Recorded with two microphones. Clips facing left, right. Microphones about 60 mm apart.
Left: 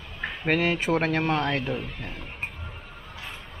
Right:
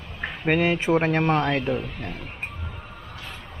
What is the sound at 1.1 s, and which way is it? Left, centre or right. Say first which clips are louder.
Speech: right 3 dB; right.